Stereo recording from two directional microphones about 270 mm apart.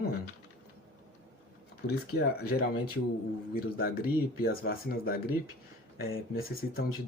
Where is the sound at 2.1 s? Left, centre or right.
Left.